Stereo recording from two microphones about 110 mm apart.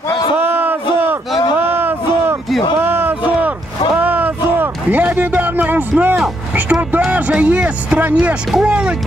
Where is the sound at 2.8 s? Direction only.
20° right (ahead or behind).